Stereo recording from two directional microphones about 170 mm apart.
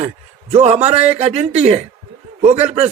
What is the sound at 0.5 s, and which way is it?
A man's voice, 40° right (ahead or behind).